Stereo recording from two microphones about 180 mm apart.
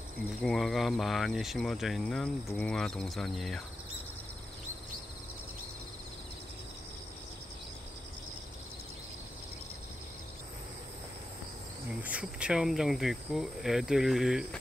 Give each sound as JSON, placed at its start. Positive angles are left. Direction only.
{"t": 0.4, "sound": "speech", "side_deg": 0}
{"t": 12.0, "sound": "speech", "side_deg": -5}